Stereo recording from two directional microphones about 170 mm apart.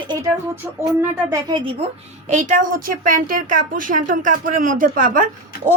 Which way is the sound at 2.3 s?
45° right (ahead or behind).